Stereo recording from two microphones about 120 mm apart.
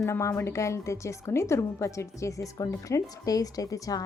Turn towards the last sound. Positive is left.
turn(degrees=30)  # may be behind; listen again after turning